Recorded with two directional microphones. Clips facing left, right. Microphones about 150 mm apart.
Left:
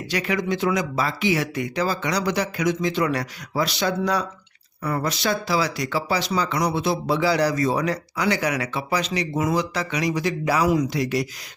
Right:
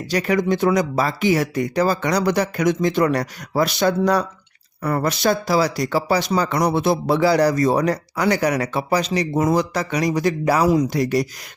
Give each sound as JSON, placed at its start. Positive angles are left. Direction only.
{"t": 0.1, "sound": "speech", "side_deg": -40}